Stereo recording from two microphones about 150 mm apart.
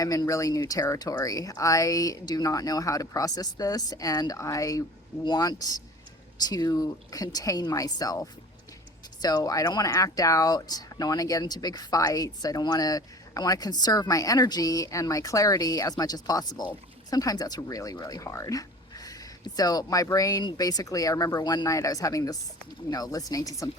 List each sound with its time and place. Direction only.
0.0 s speech: 25° left (ahead or behind)